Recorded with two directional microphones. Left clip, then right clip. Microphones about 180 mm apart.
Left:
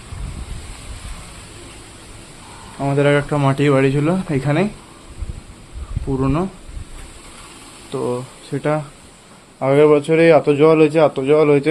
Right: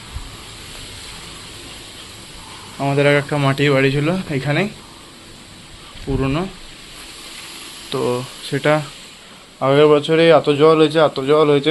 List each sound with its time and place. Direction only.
2.7 s a man's voice: 10° left (ahead or behind); by 4.7 s 30° left (ahead or behind)
6.1 s a man's voice: 20° left (ahead or behind)
7.9 s a man's voice: centre (ahead or behind); by 11.7 s 15° left (ahead or behind)